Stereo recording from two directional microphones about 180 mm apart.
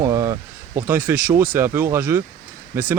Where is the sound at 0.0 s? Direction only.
20° right (ahead or behind).